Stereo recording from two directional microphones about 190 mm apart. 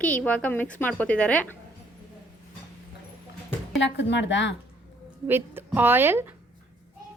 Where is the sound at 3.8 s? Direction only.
70° left (ahead or behind).